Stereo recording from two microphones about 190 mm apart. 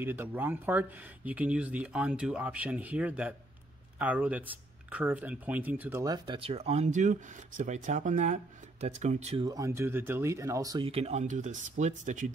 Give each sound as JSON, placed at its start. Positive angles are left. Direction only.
{"t": 0.0, "sound": "speech", "side_deg": -10}
{"t": 9.5, "sound": "speech", "side_deg": -15}
{"t": 10.9, "sound": "speech", "side_deg": -30}